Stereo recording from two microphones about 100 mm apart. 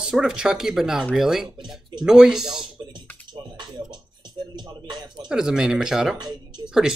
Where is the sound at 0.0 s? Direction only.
5° right (ahead or behind).